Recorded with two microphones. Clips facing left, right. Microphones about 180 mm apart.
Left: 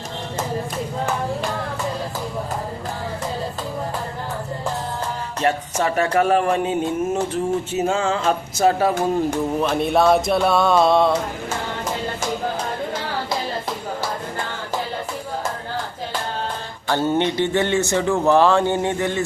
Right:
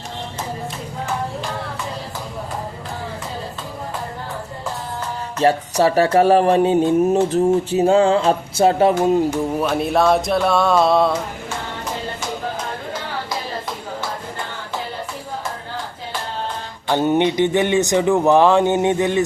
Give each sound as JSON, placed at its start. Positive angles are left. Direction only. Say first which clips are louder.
{"t": 5.4, "sound": "speech", "louder": "right 5 dB", "side_deg": -35}
{"t": 9.6, "sound": "music", "louder": "left 1 dB", "side_deg": -5}
{"t": 16.9, "sound": "speech", "louder": "right 3 dB", "side_deg": -15}